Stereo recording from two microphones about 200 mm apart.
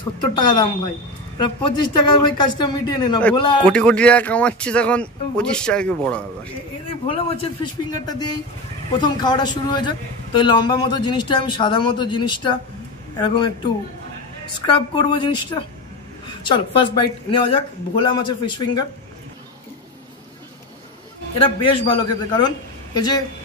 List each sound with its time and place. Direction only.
0.2 s a man's voice: 20° left (ahead or behind)
3.6 s speech: 5° left (ahead or behind)
7.1 s a man's voice: 30° left (ahead or behind)
14.7 s a man's voice: 25° left (ahead or behind)
21.5 s a man's voice: 25° left (ahead or behind)